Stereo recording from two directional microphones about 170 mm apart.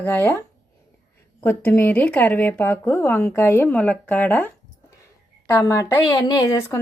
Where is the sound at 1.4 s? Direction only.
15° left (ahead or behind).